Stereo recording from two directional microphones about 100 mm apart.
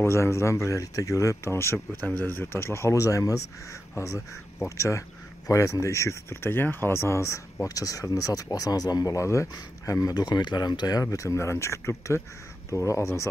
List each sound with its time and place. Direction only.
0.0 s speech: 25° left (ahead or behind)